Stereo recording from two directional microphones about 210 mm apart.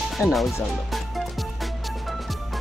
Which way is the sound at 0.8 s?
Centre (ahead or behind).